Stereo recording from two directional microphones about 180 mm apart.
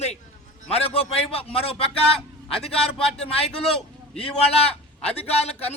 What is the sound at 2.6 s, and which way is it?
Speech, 5° left (ahead or behind).